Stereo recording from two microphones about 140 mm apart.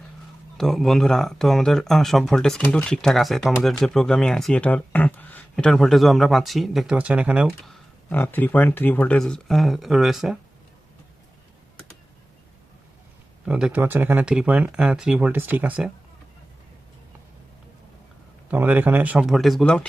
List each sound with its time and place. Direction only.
0.5 s speech: centre (ahead or behind)
8.1 s speech: 15° left (ahead or behind); by 10.3 s centre (ahead or behind)
13.4 s speech: 5° right (ahead or behind)
18.5 s speech: 10° right (ahead or behind); by 19.9 s 5° left (ahead or behind)